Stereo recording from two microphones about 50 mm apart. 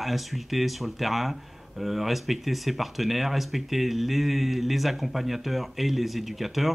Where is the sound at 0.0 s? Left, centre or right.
Centre.